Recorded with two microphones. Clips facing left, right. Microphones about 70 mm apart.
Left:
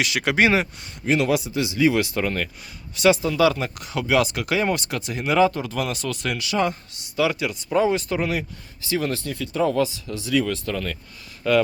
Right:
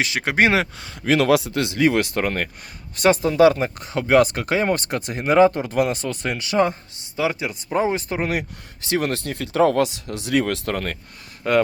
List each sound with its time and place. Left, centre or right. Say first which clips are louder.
0.0 s speech: right 1 dB; right
0.5 s speech: right 1 dB; right
8.3 s speech: right 1 dB; right
11.4 s speech: right 1 dB; right